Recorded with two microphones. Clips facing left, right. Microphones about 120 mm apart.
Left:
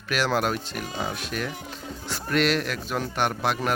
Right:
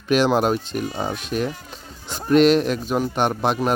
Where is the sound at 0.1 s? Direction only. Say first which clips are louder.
Right 7 dB; 20° right (ahead or behind).